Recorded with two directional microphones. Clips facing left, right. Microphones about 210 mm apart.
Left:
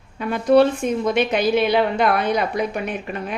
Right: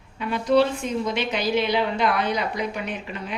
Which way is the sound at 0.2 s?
50° left (ahead or behind).